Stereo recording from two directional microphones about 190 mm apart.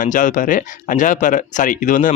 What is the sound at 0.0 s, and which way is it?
Speech, 45° left (ahead or behind).